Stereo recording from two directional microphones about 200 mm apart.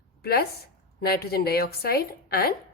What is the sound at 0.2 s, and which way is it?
A woman's voice, 50° left (ahead or behind).